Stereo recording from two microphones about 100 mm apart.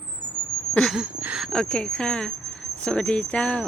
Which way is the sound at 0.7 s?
5° left (ahead or behind).